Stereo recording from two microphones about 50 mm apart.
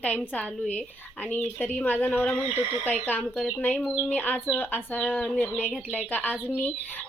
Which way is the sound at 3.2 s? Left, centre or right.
Centre.